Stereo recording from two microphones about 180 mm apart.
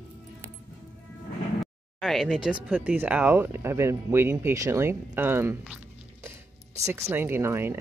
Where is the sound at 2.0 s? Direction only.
Centre (ahead or behind).